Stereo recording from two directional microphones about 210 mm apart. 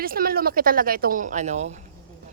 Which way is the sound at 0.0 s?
45° right (ahead or behind).